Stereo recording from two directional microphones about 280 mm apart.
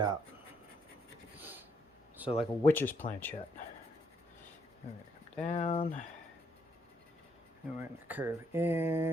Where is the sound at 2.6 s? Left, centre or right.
Centre.